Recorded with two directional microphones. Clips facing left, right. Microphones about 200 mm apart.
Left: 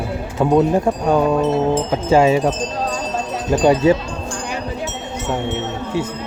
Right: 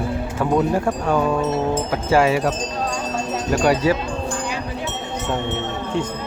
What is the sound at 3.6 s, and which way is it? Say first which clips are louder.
Speech: left 5 dB; 20° left (ahead or behind).